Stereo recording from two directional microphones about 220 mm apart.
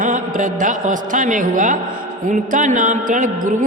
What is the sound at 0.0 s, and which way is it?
Speech, 35° right (ahead or behind).